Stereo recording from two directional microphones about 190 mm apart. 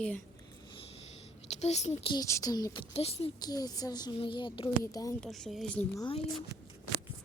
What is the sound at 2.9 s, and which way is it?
Speech, 30° left (ahead or behind).